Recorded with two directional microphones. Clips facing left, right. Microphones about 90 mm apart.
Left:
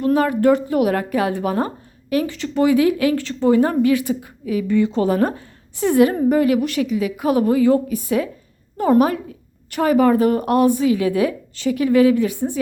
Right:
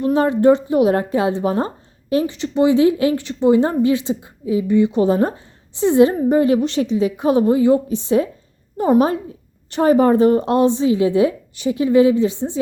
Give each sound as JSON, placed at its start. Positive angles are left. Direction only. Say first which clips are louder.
{"t": 0.0, "sound": "a woman's voice", "louder": "right 2 dB", "side_deg": -25}